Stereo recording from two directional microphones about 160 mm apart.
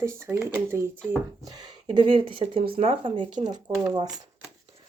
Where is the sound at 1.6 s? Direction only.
30° right (ahead or behind).